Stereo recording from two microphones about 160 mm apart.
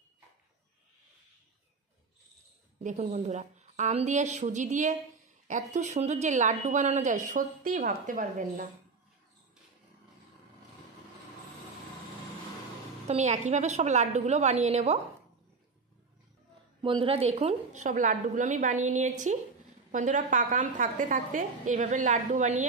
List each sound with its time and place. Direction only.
2.8 s a woman's voice: 50° right (ahead or behind)
13.0 s a woman's voice: 45° right (ahead or behind)
16.8 s a woman's voice: 35° right (ahead or behind); by 22.7 s 50° right (ahead or behind)